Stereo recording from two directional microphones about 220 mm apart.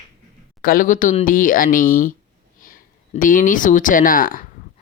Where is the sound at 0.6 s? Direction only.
40° left (ahead or behind).